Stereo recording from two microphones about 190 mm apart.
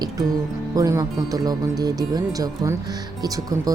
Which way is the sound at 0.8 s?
20° right (ahead or behind).